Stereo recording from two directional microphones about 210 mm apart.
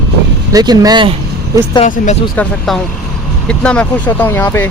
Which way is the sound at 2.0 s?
40° left (ahead or behind).